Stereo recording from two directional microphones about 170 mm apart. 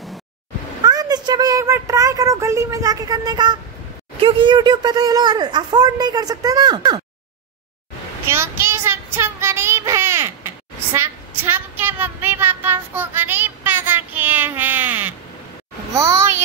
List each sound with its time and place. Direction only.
0.8 s speech: 25° right (ahead or behind)
8.3 s child singing: 15° right (ahead or behind)
15.9 s a sound: 20° right (ahead or behind)